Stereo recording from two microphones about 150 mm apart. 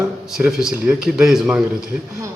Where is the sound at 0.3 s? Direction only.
5° right (ahead or behind).